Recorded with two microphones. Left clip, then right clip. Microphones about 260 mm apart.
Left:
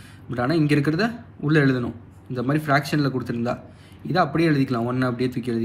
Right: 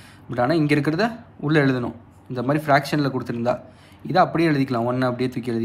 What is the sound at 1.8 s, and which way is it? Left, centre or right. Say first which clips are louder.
A man's voice: right 1 dB; right.